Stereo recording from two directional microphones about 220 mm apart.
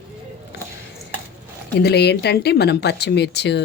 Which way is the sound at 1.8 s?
50° left (ahead or behind).